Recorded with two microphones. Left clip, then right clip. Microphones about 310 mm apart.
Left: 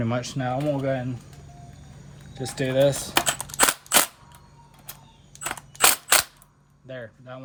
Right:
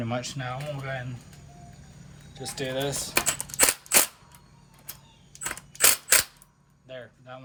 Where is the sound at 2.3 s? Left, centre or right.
Left.